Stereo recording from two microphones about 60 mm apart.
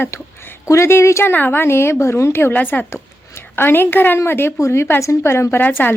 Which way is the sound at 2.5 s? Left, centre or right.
Left.